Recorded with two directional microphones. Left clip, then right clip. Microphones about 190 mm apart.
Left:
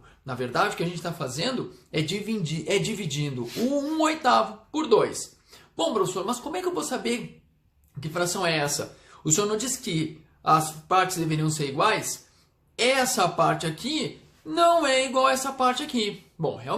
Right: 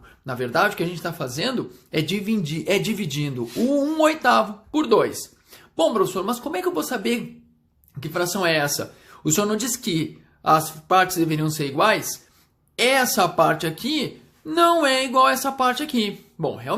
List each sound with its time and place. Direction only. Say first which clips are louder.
0.3 s speech: right 5 dB; 40° right (ahead or behind)